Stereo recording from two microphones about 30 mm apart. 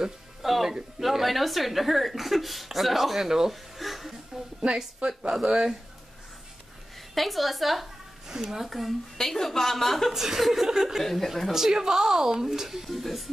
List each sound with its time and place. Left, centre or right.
0.4 s a woman's voice: centre
3.8 s a sound: centre
5.3 s speech: right
7.2 s a woman's voice: centre
8.3 s a woman's voice: centre
8.5 s a woman's voice: centre
9.2 s a woman's voice: centre
10.1 s a woman's voice: centre
11.0 s a woman's voice: centre
11.5 s a woman's voice: centre